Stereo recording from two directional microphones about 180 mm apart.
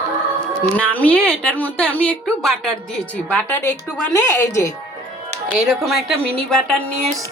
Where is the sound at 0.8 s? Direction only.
5° left (ahead or behind).